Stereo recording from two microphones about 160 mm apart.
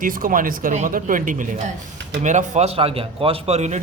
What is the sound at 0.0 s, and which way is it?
A man's voice, 60° right (ahead or behind).